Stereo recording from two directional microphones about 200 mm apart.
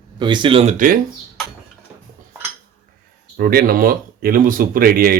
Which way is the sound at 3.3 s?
50° right (ahead or behind).